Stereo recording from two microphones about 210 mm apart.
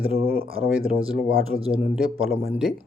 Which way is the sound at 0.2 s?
45° right (ahead or behind).